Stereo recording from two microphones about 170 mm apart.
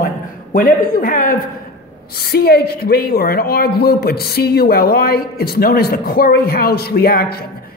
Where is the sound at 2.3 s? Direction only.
70° left (ahead or behind).